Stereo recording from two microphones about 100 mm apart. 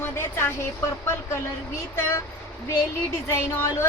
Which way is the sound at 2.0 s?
25° left (ahead or behind).